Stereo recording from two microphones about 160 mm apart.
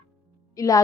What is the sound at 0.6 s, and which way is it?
Music, 20° left (ahead or behind).